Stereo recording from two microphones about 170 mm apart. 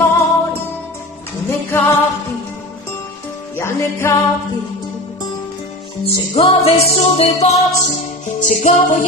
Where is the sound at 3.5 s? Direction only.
15° left (ahead or behind).